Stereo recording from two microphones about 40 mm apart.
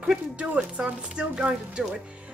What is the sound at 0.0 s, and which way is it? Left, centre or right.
Music, right.